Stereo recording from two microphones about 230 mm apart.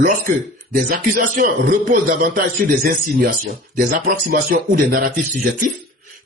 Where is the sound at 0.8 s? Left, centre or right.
Right.